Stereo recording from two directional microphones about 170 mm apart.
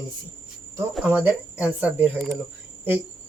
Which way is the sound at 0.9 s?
10° right (ahead or behind).